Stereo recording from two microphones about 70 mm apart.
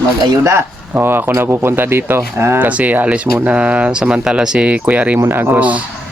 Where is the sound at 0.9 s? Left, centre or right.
Right.